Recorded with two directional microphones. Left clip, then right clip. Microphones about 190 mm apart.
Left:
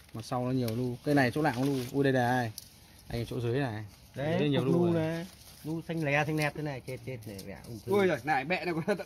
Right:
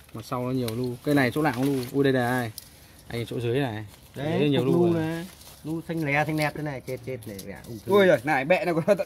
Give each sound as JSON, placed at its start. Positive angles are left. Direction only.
{"t": 0.3, "sound": "speech", "side_deg": 30}
{"t": 4.9, "sound": "speech", "side_deg": 40}
{"t": 7.9, "sound": "speech", "side_deg": -35}